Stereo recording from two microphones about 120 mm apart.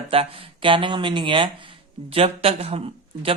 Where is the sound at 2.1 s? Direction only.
55° right (ahead or behind).